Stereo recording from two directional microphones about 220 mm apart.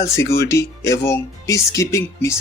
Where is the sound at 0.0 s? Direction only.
15° left (ahead or behind).